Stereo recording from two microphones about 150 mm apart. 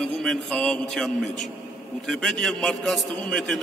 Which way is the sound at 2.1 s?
Centre (ahead or behind).